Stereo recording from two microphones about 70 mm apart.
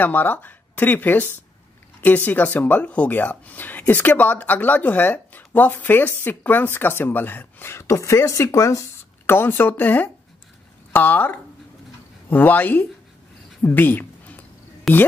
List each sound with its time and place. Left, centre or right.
0.0 s speech: left
9.2 s speech: left
13.6 s a sound: left
14.9 s speech: centre